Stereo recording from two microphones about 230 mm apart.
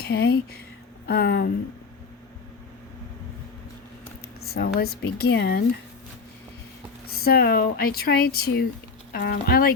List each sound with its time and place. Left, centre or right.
0.0 s speech: left
4.8 s speech: left
7.3 s speech: left